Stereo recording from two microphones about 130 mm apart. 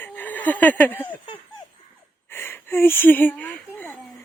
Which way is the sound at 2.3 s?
15° left (ahead or behind).